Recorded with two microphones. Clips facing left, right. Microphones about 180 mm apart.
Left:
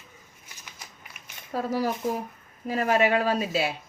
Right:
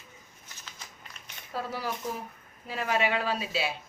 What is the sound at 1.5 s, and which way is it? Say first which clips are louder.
Speech: left 7 dB; 45° left (ahead or behind).